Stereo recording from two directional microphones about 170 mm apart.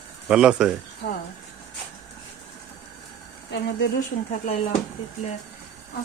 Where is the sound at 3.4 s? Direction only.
80° left.